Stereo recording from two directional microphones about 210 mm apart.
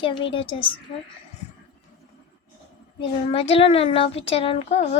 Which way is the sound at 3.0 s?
25° left (ahead or behind).